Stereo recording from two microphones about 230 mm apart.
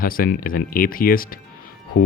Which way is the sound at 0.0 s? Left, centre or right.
Left.